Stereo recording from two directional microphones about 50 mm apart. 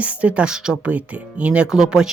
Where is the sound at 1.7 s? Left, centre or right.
Centre.